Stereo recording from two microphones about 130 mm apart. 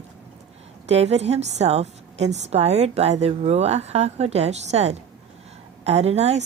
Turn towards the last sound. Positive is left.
turn(degrees=-55)  # may be behind; listen again after turning